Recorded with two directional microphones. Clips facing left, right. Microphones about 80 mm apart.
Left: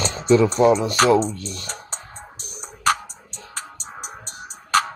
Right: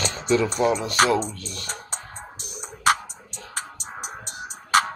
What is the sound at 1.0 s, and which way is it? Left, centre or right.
Speech, left.